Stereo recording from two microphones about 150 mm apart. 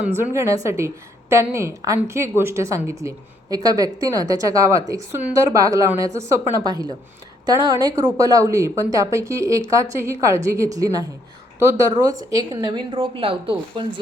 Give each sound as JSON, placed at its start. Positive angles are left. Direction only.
{"t": 0.0, "sound": "a woman's voice", "side_deg": -15}